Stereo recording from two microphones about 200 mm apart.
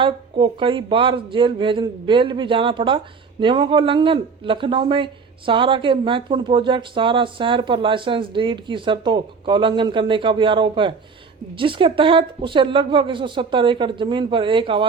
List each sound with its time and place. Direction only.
0.0 s speech: 25° right (ahead or behind)